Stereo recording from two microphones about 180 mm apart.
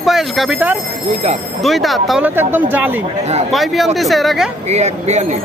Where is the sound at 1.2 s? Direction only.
35° right (ahead or behind).